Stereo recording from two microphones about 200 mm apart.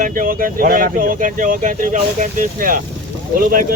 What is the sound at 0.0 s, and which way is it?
Speech, 45° right (ahead or behind).